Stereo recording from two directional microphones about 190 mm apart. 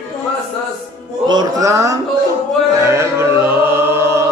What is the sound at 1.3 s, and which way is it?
Music, 20° right (ahead or behind).